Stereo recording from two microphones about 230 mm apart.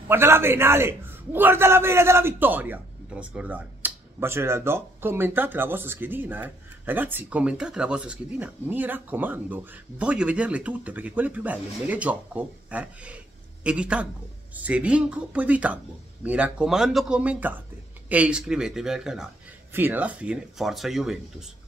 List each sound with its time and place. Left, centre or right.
0.1 s a man's voice: centre